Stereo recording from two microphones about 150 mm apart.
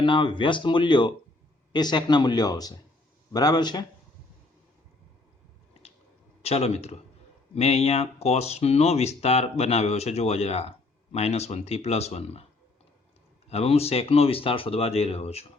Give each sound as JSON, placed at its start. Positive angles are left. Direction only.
{"t": 0.0, "sound": "speech", "side_deg": 30}
{"t": 6.4, "sound": "speech", "side_deg": 45}
{"t": 13.5, "sound": "speech", "side_deg": 45}